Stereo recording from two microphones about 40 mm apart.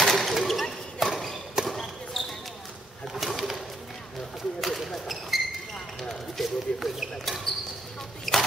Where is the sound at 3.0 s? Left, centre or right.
Centre.